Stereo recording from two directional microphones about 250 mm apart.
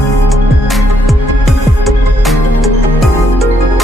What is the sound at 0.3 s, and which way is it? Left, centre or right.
Music, centre.